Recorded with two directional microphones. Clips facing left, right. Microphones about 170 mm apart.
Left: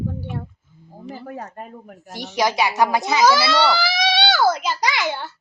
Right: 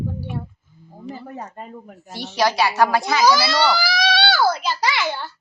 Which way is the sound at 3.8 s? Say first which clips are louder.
Even; 20° left (ahead or behind).